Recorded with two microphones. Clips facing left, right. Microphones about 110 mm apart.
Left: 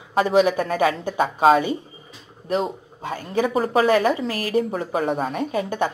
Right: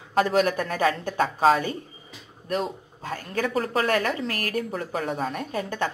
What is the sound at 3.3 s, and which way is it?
A woman's voice, 15° left (ahead or behind).